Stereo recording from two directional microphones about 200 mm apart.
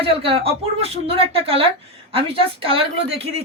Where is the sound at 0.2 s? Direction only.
30° right (ahead or behind).